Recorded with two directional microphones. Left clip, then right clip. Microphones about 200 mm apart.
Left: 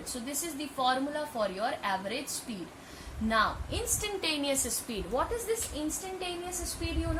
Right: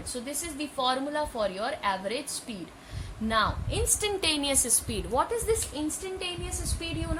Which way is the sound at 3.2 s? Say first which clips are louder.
Right 1 dB; 45° right (ahead or behind).